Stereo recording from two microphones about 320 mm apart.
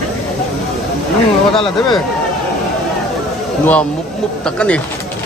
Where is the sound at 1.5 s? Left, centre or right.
Centre.